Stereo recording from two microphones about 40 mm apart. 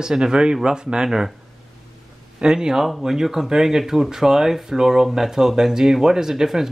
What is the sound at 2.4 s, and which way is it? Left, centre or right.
Speech, centre.